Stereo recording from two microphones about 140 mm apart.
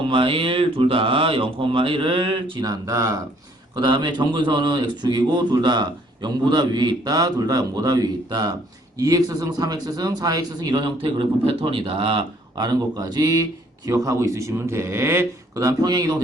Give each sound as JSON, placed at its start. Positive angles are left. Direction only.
{"t": 0.0, "sound": "a man's voice", "side_deg": -40}